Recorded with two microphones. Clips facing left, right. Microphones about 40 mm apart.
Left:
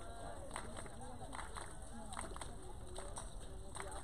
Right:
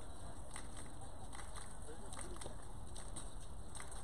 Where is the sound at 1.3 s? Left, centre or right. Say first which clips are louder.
Left 5 dB; left.